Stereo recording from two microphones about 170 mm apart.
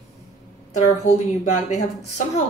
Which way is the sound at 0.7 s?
45° left (ahead or behind).